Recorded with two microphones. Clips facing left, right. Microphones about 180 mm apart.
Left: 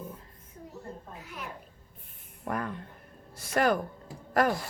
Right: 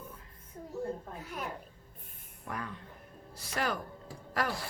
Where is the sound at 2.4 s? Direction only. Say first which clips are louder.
Left 7 dB; 50° left (ahead or behind).